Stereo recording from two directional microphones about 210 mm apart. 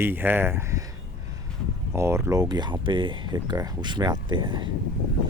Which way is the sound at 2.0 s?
10° right (ahead or behind).